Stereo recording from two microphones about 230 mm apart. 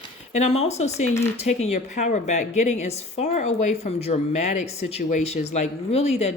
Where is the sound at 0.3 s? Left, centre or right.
Left.